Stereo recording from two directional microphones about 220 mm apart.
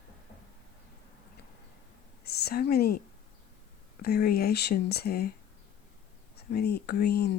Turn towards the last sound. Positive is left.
turn(degrees=45)  # may be behind; listen again after turning